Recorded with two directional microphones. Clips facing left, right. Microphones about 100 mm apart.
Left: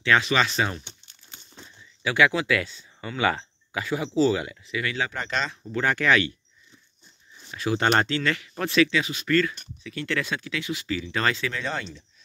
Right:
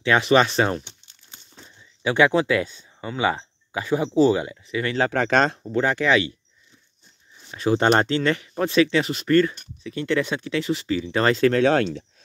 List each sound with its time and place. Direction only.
0.3 s speech: 35° right (ahead or behind)
2.0 s speech: 25° right (ahead or behind)
5.1 s speech: 80° right
5.6 s speech: 25° right (ahead or behind)
7.5 s speech: 30° right (ahead or behind)
11.3 s speech: 50° right (ahead or behind)
11.6 s speech: 70° right (ahead or behind)